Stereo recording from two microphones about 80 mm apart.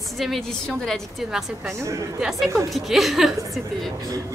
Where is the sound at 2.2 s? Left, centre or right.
Centre.